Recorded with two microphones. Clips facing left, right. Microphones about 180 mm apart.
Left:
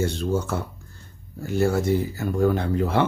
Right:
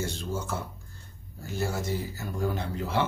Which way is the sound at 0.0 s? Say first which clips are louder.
Left 9 dB; 65° left (ahead or behind).